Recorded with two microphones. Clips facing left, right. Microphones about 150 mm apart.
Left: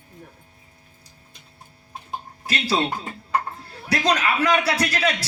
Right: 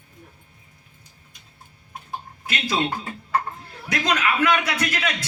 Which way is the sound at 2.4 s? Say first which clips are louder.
Left 2 dB; 35° left (ahead or behind).